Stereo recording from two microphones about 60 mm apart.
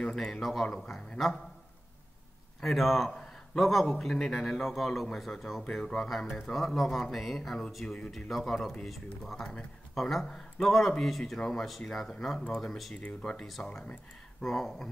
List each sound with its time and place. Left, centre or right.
0.0 s a man's voice: centre
2.6 s a man's voice: centre
12.9 s speech: centre
14.4 s a man's voice: centre